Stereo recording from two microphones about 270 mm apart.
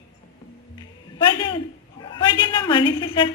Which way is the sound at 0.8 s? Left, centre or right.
Centre.